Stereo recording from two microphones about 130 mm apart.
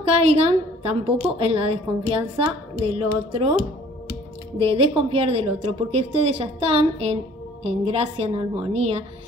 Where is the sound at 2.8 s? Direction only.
45° right (ahead or behind).